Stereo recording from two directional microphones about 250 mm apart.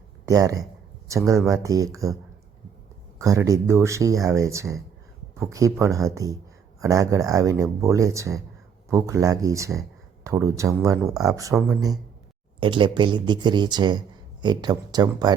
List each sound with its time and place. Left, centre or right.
0.3 s speech: centre
3.2 s speech: centre